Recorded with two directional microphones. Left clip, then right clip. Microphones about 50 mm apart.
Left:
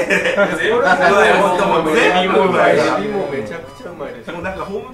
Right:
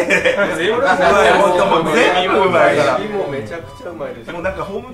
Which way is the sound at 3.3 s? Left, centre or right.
Centre.